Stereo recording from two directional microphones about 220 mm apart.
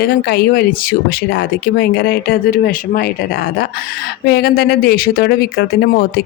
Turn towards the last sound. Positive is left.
turn(degrees=45)  # may be behind; listen again after turning